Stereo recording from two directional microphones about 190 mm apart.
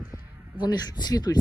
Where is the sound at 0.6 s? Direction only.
20° left (ahead or behind).